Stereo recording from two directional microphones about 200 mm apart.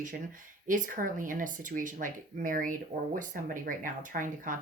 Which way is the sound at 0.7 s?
40° right (ahead or behind).